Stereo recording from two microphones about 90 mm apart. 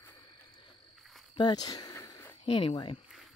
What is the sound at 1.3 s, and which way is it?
Speech, 55° left (ahead or behind).